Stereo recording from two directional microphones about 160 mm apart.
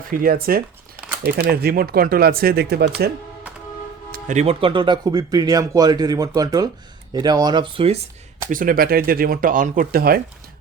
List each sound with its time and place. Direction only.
0.1 s speech: 65° right (ahead or behind)
1.2 s speech: 75° right (ahead or behind)
4.1 s music: 50° right (ahead or behind)
4.6 s speech: 30° right (ahead or behind)
8.4 s speech: 60° right (ahead or behind)